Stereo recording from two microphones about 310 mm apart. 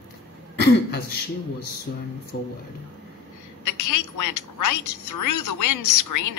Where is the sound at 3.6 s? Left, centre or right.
Left.